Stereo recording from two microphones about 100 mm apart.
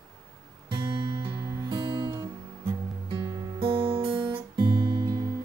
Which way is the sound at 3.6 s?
55° right (ahead or behind).